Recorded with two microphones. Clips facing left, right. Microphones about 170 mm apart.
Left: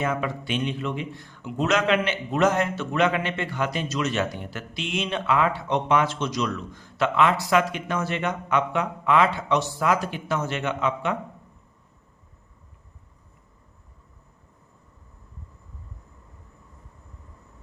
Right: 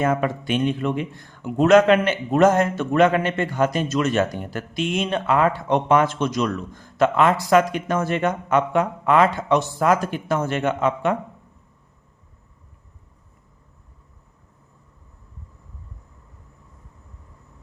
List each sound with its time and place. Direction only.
0.0 s a man's voice: 50° right (ahead or behind)